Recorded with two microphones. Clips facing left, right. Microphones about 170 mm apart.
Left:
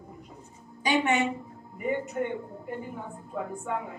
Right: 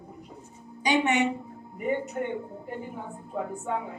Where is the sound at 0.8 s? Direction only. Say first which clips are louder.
Right 1 dB; 20° right (ahead or behind).